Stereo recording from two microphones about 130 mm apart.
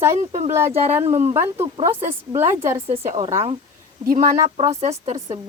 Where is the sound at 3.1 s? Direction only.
55° right (ahead or behind).